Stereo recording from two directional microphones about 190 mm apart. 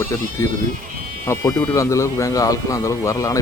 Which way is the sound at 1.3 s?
10° left (ahead or behind).